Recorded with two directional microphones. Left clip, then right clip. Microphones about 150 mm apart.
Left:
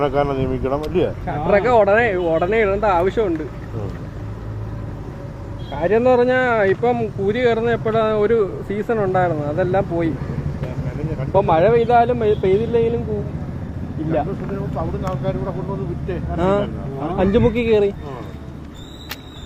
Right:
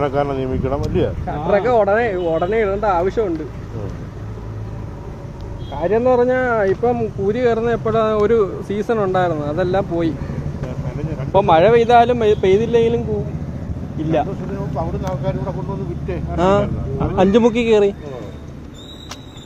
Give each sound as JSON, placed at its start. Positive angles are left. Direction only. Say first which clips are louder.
{"t": 0.0, "sound": "speech", "louder": "even", "side_deg": -10}
{"t": 5.7, "sound": "speech", "louder": "even", "side_deg": 5}
{"t": 11.3, "sound": "speech", "louder": "right 3 dB", "side_deg": -30}
{"t": 15.0, "sound": "speech", "louder": "right 1 dB", "side_deg": -50}
{"t": 16.0, "sound": "speech", "louder": "right 3 dB", "side_deg": -20}